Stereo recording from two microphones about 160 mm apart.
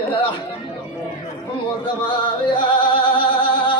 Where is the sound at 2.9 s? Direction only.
35° left (ahead or behind).